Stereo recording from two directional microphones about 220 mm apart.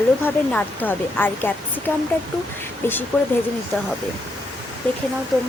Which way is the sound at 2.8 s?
10° left (ahead or behind).